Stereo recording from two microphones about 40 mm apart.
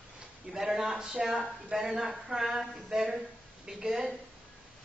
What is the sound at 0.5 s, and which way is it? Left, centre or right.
A man's voice, right.